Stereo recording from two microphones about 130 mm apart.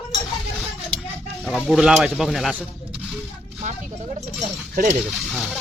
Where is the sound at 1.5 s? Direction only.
5° right (ahead or behind).